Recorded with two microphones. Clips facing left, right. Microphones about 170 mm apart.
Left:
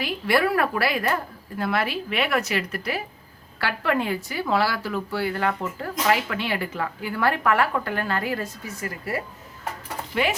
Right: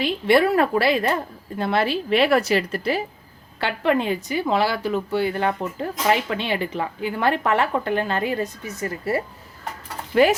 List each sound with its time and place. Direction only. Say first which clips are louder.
0.0 s a woman's voice: right 5 dB; 25° right (ahead or behind)
10.1 s speech: right 8 dB; 40° right (ahead or behind)